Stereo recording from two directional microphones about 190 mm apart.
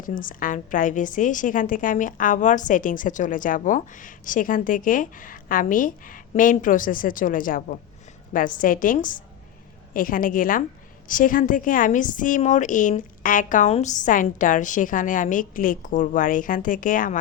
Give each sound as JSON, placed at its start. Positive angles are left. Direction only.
{"t": 0.0, "sound": "a woman's voice", "side_deg": 45}